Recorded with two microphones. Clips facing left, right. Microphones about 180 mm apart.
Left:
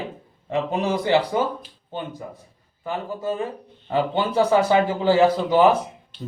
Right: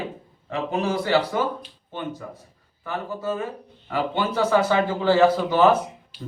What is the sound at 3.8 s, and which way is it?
Speech, 30° left (ahead or behind).